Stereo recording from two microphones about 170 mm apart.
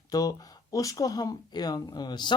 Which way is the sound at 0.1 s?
20° left (ahead or behind).